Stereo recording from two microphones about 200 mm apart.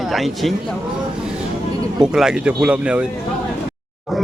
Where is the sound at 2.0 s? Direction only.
5° right (ahead or behind).